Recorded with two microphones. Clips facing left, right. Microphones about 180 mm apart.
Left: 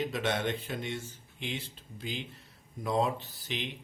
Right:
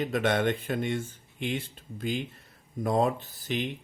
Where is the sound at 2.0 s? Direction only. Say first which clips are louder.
Right 7 dB; 50° right (ahead or behind).